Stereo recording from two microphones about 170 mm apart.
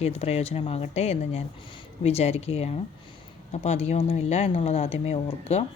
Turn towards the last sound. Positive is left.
turn(degrees=35)  # may be behind; listen again after turning